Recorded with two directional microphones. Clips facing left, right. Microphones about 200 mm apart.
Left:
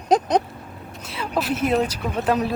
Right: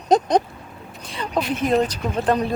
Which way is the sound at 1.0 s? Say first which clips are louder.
Right 1 dB; 5° left (ahead or behind).